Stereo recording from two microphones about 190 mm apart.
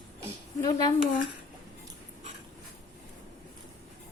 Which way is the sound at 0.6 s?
20° left (ahead or behind).